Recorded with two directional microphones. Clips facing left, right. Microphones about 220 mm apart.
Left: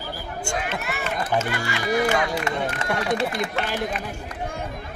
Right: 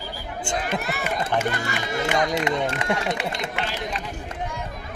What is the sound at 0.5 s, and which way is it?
Speech, 20° right (ahead or behind).